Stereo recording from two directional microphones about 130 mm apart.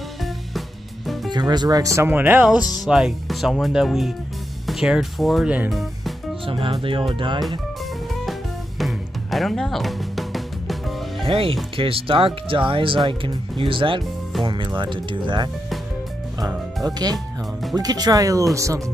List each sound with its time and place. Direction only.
0.2 s music: centre (ahead or behind)
1.3 s speech: 35° right (ahead or behind); by 5.5 s centre (ahead or behind)
5.7 s music: centre (ahead or behind)
6.4 s speech: 40° right (ahead or behind)
8.3 s music: centre (ahead or behind)
11.2 s speech: 45° right (ahead or behind)
16.3 s music: 30° right (ahead or behind)
17.7 s speech: 30° right (ahead or behind)